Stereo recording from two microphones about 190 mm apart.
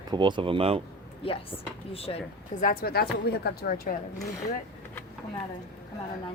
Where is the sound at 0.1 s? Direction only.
25° right (ahead or behind).